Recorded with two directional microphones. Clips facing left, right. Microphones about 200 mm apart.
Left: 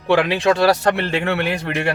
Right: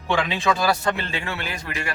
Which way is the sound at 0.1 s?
65° left (ahead or behind).